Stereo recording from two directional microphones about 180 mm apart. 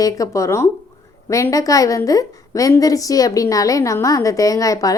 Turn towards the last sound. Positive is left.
turn(degrees=20)  # may be behind; listen again after turning